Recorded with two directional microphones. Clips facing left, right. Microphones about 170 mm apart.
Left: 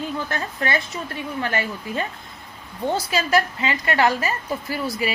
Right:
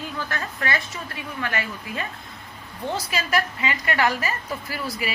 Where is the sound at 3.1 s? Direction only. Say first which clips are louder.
Left 4 dB; 30° left (ahead or behind).